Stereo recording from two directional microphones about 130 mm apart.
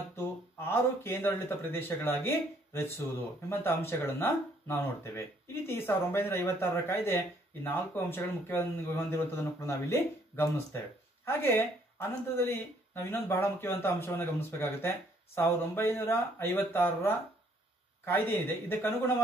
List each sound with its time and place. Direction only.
0.1 s speech: 20° left (ahead or behind)